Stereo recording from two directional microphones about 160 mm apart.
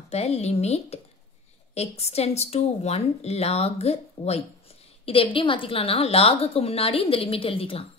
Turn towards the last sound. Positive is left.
turn(degrees=35)  # may be behind; listen again after turning